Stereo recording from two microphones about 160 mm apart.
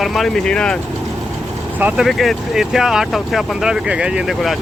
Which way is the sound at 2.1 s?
Centre (ahead or behind).